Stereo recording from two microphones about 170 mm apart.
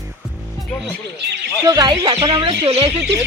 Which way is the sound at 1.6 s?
20° right (ahead or behind).